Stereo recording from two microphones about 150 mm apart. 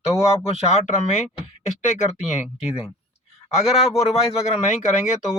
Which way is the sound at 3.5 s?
45° left (ahead or behind).